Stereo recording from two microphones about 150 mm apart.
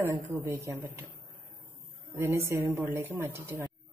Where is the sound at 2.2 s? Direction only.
15° right (ahead or behind).